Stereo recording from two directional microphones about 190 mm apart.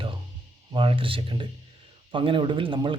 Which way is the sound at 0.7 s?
25° right (ahead or behind).